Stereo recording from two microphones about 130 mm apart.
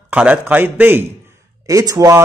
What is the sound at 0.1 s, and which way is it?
A man's voice, 10° right (ahead or behind).